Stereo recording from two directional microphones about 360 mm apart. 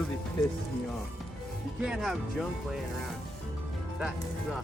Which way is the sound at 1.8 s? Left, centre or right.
Centre.